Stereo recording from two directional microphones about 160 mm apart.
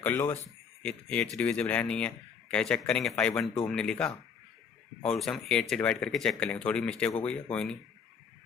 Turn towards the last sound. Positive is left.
turn(degrees=5)  # may be behind; listen again after turning